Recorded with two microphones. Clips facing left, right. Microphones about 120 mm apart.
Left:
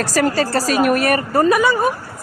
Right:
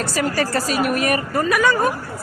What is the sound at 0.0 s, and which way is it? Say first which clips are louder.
A woman's voice: left 4 dB; 40° left (ahead or behind).